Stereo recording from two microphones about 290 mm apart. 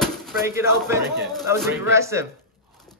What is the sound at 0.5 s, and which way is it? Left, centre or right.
Speech, centre.